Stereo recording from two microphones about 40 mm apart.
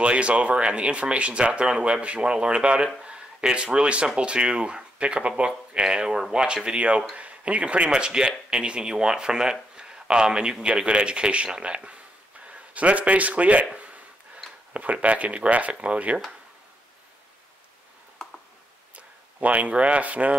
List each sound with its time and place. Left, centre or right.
0.0 s speech: right
14.7 s speech: right
18.9 s speech: right